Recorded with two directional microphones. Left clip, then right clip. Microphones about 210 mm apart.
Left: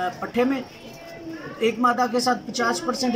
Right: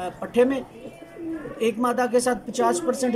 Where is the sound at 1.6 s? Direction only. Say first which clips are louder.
Left 2 dB; 15° right (ahead or behind).